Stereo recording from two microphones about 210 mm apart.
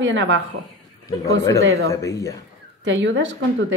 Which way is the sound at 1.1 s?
15° left (ahead or behind).